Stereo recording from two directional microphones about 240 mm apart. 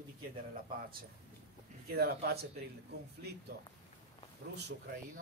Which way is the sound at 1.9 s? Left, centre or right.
Right.